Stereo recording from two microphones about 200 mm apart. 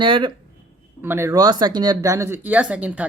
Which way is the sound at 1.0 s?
10° right (ahead or behind).